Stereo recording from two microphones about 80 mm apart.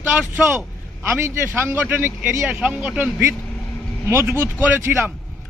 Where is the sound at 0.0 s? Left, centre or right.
Right.